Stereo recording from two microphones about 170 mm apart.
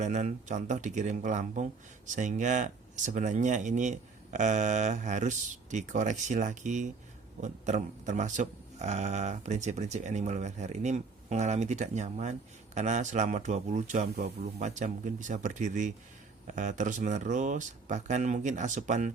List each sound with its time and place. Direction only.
0.0 s speech: 45° right (ahead or behind)